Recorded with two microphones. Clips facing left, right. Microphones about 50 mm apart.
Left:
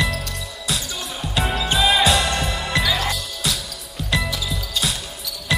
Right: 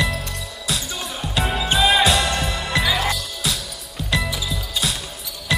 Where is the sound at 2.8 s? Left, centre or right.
Centre.